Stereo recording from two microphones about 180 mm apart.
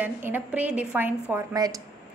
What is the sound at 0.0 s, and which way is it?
A woman's voice, 10° right (ahead or behind).